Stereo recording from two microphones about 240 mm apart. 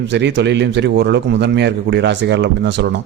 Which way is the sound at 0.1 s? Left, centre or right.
Right.